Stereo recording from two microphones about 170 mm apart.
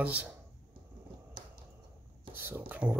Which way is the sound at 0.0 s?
10° right (ahead or behind).